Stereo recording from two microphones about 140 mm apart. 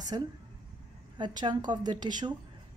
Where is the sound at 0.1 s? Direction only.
35° right (ahead or behind).